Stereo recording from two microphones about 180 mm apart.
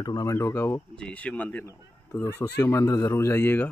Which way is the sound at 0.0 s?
20° left (ahead or behind).